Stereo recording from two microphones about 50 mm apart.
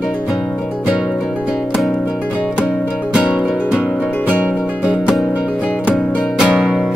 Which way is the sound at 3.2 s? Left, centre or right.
Centre.